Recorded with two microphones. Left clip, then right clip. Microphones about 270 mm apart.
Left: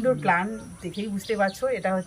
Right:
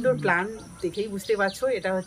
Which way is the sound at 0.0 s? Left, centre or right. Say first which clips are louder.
Left 1 dB; centre.